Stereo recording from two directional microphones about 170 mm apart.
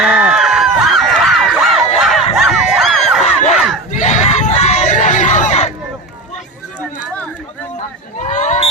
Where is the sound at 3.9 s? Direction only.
45° left (ahead or behind).